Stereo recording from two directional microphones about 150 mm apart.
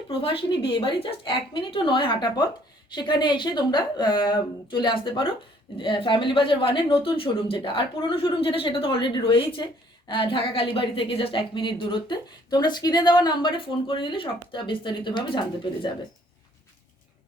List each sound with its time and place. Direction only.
0.1 s a woman's voice: 35° left (ahead or behind)